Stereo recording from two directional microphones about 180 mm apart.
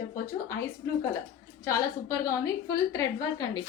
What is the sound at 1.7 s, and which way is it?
A woman's voice, 20° left (ahead or behind).